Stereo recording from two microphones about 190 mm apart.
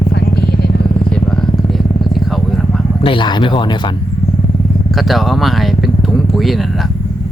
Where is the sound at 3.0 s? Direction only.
25° left (ahead or behind).